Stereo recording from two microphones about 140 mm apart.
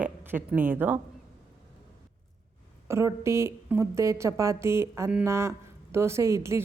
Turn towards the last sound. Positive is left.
turn(degrees=-20)  # may be behind; listen again after turning